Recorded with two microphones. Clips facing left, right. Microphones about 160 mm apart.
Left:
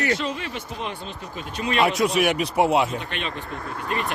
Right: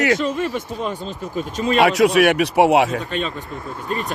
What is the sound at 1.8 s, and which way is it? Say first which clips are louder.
Speech: right 6 dB; 70° right (ahead or behind).